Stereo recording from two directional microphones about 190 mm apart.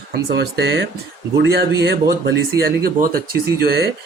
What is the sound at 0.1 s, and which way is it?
A man's voice, 60° right (ahead or behind).